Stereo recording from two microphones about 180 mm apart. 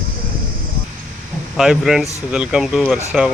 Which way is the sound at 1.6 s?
Centre (ahead or behind).